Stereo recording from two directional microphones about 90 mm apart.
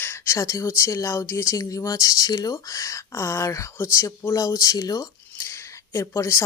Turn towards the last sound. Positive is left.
turn(degrees=30)  # may be behind; listen again after turning